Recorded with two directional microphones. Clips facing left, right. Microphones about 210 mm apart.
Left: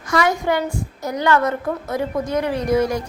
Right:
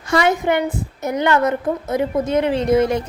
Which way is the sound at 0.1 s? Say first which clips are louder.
Right 2 dB; 25° right (ahead or behind).